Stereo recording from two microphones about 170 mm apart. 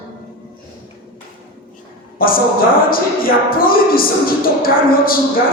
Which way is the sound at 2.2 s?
60° left (ahead or behind).